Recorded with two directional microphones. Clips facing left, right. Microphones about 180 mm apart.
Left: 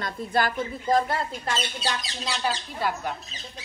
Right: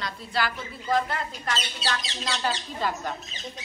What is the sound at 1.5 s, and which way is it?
A woman's voice, 15° left (ahead or behind).